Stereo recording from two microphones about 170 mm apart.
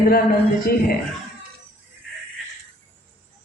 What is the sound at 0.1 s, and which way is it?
Speech, 55° left (ahead or behind).